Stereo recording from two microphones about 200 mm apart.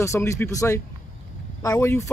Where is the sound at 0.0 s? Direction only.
15° left (ahead or behind).